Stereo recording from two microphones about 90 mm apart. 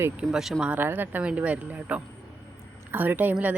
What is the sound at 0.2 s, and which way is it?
Speech, 10° right (ahead or behind).